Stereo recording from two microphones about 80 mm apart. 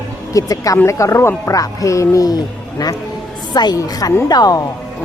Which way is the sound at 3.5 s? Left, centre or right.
Left.